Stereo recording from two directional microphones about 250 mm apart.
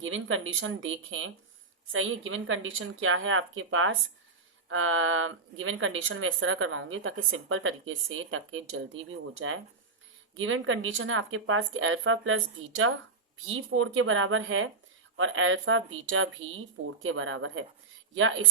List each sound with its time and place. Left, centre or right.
0.0 s speech: right